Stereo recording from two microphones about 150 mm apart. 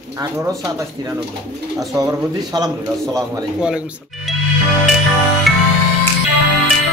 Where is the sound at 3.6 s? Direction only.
5° right (ahead or behind).